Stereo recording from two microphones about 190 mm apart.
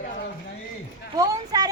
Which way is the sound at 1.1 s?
20° right (ahead or behind).